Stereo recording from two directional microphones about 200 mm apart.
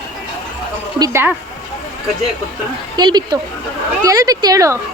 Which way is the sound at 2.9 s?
20° right (ahead or behind).